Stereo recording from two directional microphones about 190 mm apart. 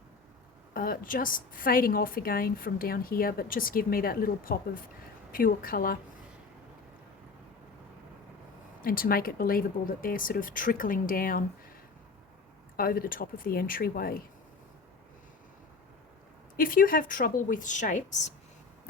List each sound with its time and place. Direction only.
0.7 s a woman's voice: 50° left (ahead or behind)
8.8 s a woman's voice: 50° left (ahead or behind)
12.7 s a woman's voice: 50° left (ahead or behind)
16.6 s a woman's voice: 45° left (ahead or behind)